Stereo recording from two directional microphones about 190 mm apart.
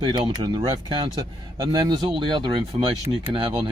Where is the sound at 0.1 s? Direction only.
20° right (ahead or behind).